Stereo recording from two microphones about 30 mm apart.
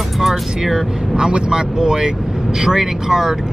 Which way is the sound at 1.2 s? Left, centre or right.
Right.